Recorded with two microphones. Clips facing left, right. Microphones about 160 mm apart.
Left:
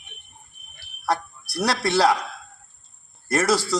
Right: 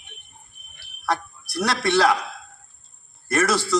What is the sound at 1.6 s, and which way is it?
Speech, 35° left (ahead or behind).